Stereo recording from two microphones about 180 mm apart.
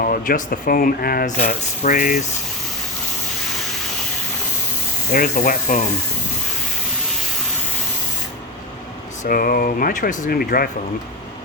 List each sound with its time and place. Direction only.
0.0 s speech: 50° left (ahead or behind)
5.3 s speech: 50° left (ahead or behind)
9.2 s speech: 50° left (ahead or behind)